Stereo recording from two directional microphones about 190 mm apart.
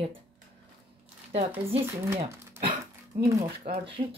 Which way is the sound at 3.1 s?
45° right (ahead or behind).